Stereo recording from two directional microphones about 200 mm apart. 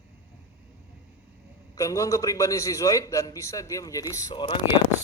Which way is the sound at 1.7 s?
15° left (ahead or behind).